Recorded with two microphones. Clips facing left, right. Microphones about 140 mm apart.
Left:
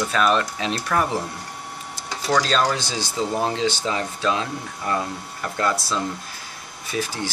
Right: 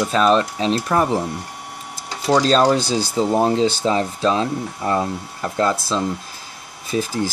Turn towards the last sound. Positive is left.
turn(degrees=-30)  # may be behind; listen again after turning